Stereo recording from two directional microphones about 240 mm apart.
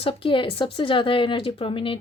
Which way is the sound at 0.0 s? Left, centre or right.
Left.